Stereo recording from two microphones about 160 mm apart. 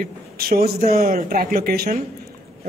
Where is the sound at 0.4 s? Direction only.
70° right (ahead or behind).